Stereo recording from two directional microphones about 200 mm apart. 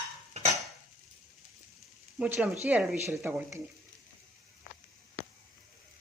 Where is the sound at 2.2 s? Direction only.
5° right (ahead or behind).